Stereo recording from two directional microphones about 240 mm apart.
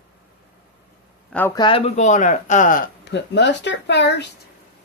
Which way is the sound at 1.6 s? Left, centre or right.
Left.